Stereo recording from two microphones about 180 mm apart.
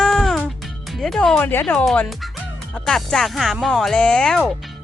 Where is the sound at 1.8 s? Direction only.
Centre (ahead or behind).